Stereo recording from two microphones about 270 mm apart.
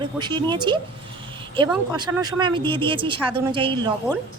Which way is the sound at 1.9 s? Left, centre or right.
Centre.